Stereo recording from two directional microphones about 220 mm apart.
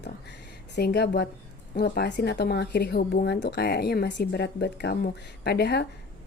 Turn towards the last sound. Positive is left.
turn(degrees=50)  # may be behind; listen again after turning